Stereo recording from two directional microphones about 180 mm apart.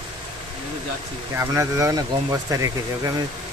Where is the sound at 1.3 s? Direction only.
15° right (ahead or behind).